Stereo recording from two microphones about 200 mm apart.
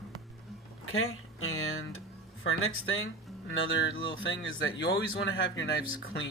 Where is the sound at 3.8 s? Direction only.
70° left (ahead or behind).